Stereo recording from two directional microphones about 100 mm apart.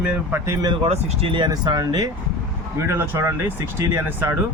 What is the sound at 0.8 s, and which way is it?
Speech, 85° right.